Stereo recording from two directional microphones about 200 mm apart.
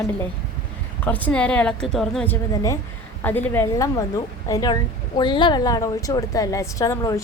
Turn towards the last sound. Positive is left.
turn(degrees=15)  # may be behind; listen again after turning